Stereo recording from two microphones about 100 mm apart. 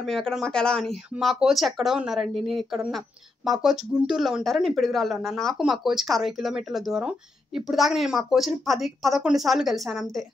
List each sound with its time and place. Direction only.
0.0 s speech: centre (ahead or behind)